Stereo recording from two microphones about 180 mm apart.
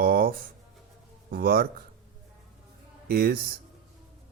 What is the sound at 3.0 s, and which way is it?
Speech, 55° right (ahead or behind).